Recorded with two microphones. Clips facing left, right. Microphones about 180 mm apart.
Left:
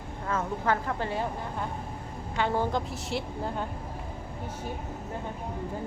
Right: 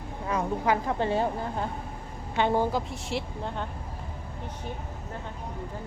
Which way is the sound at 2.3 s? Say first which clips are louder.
Right 3 dB; 20° right (ahead or behind).